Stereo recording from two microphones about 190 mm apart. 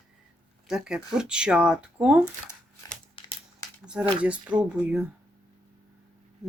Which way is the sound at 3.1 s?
25° left (ahead or behind).